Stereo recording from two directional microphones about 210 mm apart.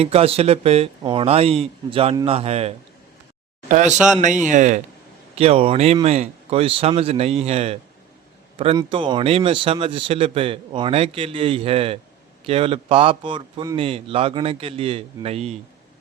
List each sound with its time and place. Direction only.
0.0 s speech: 30° right (ahead or behind)
3.9 s a man's voice: 5° right (ahead or behind)
4.4 s speech: 35° right (ahead or behind)